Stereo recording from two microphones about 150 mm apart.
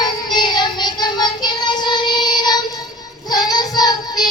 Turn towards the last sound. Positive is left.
turn(degrees=25)  # may be behind; listen again after turning